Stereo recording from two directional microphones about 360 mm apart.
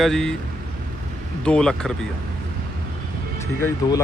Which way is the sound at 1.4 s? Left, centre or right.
Centre.